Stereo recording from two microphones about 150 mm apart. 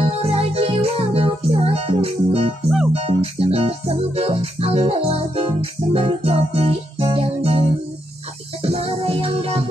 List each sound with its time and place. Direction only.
0.0 s music: 45° right (ahead or behind)
8.6 s music: 40° right (ahead or behind)